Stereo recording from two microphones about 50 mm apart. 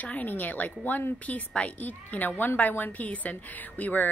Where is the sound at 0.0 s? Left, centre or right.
Left.